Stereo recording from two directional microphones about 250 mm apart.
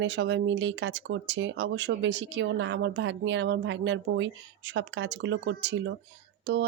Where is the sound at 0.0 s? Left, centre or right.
Right.